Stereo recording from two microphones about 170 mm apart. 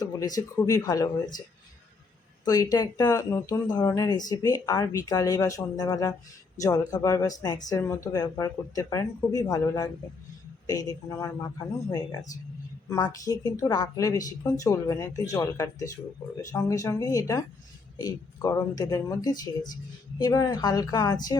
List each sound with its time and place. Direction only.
0.0 s speech: 20° left (ahead or behind)
2.4 s speech: 20° left (ahead or behind)